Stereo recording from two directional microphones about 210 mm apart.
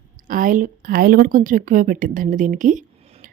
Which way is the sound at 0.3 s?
40° right (ahead or behind).